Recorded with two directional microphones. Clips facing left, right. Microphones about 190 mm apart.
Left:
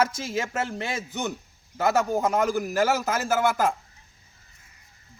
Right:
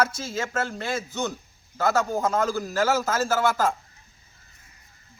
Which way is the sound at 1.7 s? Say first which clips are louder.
Left 1 dB; 15° left (ahead or behind).